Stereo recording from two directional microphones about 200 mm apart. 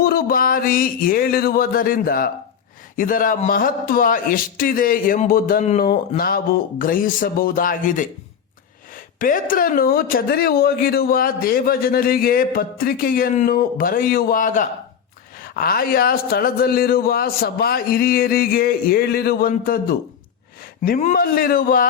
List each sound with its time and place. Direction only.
0.0 s a sound: 45° left (ahead or behind)
2.9 s speech: 45° left (ahead or behind)
9.1 s speech: 45° left (ahead or behind)